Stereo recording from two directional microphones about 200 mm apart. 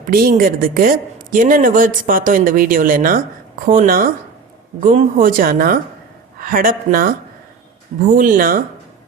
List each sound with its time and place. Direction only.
0.1 s speech: 45° right (ahead or behind)
8.1 s speech: 40° right (ahead or behind)